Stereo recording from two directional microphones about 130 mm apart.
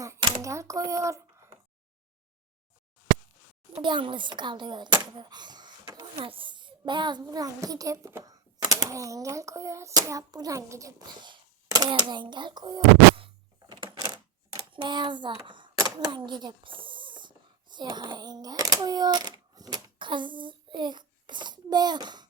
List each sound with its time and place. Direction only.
0.4 s speech: 25° right (ahead or behind)
3.8 s a child's voice: 40° right (ahead or behind)
6.1 s a child's voice: 45° right (ahead or behind); by 11.3 s 25° right (ahead or behind)
11.3 s a sound: 35° right (ahead or behind)
16.1 s a child's voice: 35° right (ahead or behind)